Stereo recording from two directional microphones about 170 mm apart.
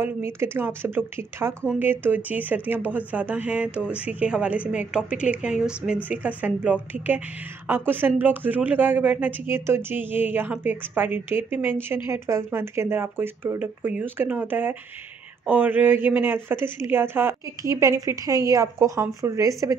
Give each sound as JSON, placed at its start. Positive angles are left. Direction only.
{"t": 0.0, "sound": "speech", "side_deg": -15}